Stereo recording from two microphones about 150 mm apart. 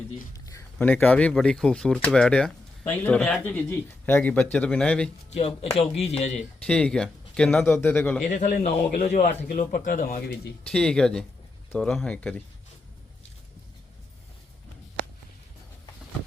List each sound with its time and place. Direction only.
0.3 s a sound: 20° left (ahead or behind)
0.9 s speech: 10° left (ahead or behind)
5.3 s speech: 45° left (ahead or behind)
6.6 s speech: 5° left (ahead or behind)
8.3 s a man's voice: 60° left (ahead or behind); by 10.5 s 85° left
10.7 s speech: 5° left (ahead or behind)